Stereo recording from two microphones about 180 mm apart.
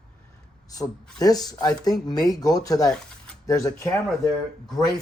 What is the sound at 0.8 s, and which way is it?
Speech, 20° left (ahead or behind).